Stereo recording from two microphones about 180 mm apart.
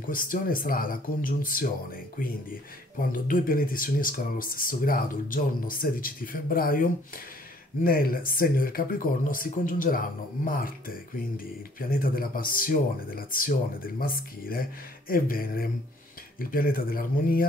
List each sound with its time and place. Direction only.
0.0 s speech: 50° left (ahead or behind)